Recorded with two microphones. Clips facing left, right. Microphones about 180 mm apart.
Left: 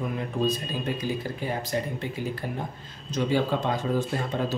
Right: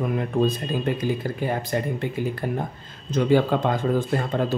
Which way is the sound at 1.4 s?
55° right (ahead or behind).